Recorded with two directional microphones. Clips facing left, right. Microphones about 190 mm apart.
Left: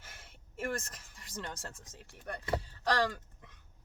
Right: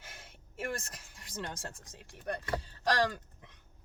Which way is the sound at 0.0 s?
15° right (ahead or behind).